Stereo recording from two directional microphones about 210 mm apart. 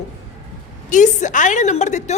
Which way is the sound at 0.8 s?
35° left (ahead or behind).